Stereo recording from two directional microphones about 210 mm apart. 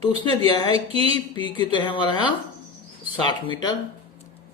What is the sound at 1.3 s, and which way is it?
Speech, 20° left (ahead or behind).